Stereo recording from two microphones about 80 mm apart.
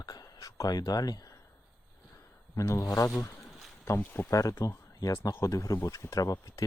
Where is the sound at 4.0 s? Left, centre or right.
Left.